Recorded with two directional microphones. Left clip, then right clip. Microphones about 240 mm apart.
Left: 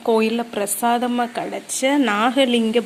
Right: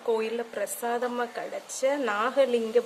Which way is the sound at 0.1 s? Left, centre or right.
Centre.